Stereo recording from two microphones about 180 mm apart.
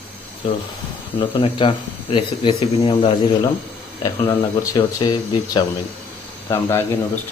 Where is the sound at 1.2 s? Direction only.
30° left (ahead or behind).